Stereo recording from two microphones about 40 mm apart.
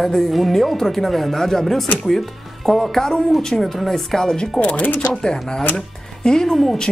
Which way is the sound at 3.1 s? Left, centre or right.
Centre.